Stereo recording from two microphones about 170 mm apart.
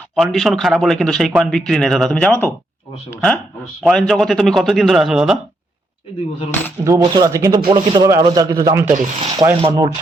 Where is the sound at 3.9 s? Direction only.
Centre (ahead or behind).